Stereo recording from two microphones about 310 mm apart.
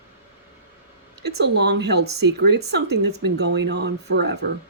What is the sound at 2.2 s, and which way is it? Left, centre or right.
Speech, right.